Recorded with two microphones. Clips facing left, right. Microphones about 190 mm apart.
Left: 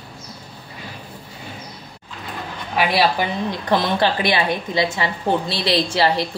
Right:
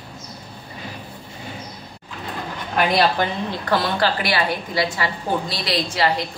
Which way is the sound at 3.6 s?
20° left (ahead or behind).